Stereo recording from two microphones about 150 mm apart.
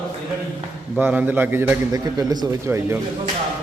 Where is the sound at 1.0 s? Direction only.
10° right (ahead or behind).